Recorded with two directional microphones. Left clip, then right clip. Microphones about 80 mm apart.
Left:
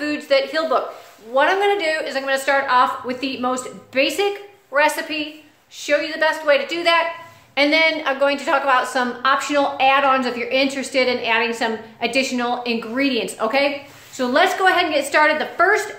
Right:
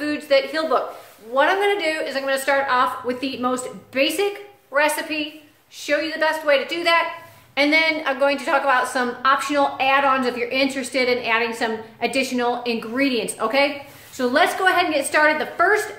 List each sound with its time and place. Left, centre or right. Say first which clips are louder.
0.0 s a woman's voice: left 1 dB; centre